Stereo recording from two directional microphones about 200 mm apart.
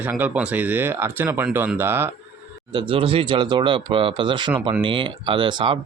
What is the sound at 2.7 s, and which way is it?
Speech, 25° right (ahead or behind).